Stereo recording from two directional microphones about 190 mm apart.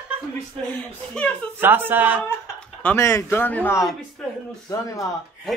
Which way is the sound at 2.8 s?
15° left (ahead or behind).